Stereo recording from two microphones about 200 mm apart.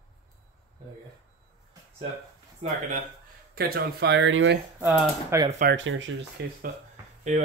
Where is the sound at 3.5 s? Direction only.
50° right (ahead or behind); by 4.6 s 70° right (ahead or behind).